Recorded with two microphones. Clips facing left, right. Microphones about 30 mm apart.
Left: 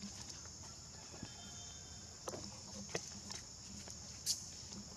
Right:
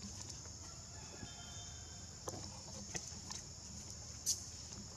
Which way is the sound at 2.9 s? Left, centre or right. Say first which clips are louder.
Left 5 dB; left.